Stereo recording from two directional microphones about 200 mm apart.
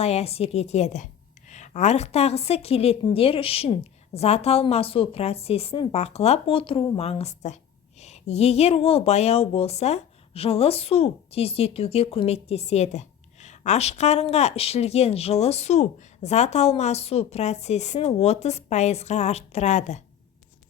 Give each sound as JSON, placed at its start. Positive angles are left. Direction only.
{"t": 0.0, "sound": "a woman's voice", "side_deg": 30}